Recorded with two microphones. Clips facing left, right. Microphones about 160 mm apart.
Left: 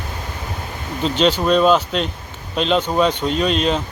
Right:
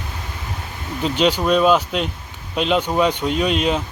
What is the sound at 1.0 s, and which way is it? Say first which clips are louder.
Speech: left 1 dB; 10° right (ahead or behind).